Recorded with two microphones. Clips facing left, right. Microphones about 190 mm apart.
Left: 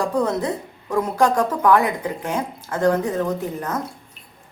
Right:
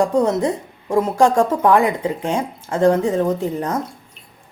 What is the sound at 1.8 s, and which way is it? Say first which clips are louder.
Speech: right 4 dB; 25° right (ahead or behind).